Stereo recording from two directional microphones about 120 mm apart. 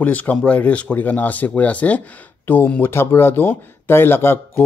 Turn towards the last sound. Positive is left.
turn(degrees=20)  # may be behind; listen again after turning